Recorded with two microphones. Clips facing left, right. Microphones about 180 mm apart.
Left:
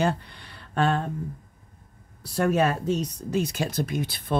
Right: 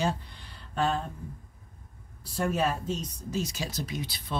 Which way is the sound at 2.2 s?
70° left (ahead or behind).